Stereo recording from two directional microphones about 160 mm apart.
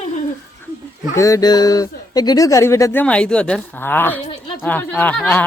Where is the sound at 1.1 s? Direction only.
20° left (ahead or behind).